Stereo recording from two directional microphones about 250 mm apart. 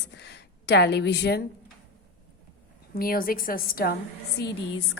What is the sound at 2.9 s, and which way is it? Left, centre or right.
A woman's voice, left.